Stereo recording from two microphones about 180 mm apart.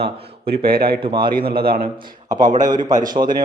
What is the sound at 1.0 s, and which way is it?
Speech, 25° right (ahead or behind).